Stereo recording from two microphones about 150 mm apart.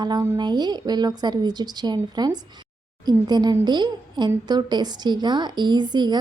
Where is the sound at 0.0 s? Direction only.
30° right (ahead or behind).